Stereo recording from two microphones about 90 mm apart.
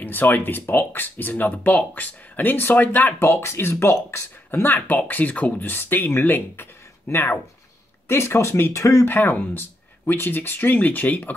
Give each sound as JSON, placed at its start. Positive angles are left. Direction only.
{"t": 0.0, "sound": "speech", "side_deg": 20}